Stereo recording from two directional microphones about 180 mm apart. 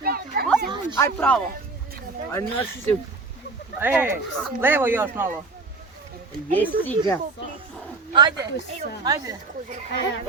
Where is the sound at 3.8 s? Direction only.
10° right (ahead or behind).